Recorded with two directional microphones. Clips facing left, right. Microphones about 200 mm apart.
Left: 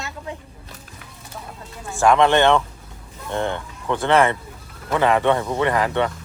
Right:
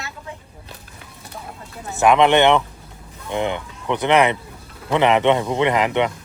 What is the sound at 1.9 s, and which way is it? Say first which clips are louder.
Speech: right 1 dB; 20° right (ahead or behind).